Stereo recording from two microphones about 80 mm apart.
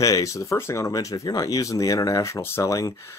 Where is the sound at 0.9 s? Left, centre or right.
Left.